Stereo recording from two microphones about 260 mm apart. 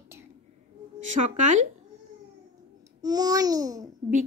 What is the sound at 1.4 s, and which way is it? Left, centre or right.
Speech, right.